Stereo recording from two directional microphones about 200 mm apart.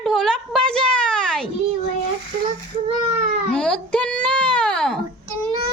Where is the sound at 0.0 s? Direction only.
Centre (ahead or behind).